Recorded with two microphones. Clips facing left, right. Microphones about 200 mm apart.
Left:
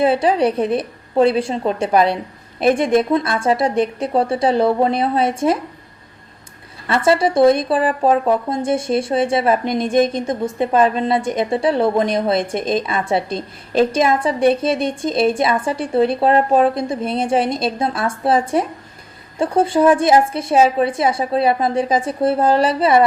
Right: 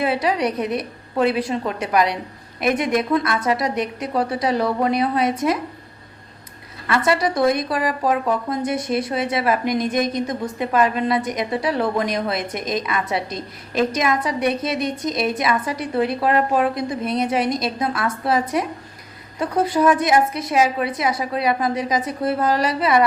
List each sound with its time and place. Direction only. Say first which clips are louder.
0.0 s speech: left 5 dB; 30° left (ahead or behind)
6.8 s speech: left 4 dB; 30° left (ahead or behind)